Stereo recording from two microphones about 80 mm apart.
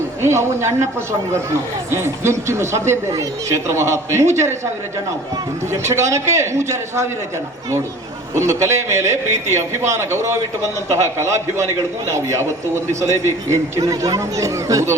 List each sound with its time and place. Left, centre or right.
0.2 s a man's voice: right
1.9 s a man's voice: right
5.9 s a man's voice: right
8.4 s a man's voice: right